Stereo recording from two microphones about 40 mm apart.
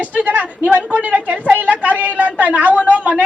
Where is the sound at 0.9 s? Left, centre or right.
Right.